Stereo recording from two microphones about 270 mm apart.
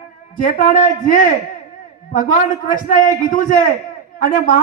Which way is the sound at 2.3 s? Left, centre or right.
Left.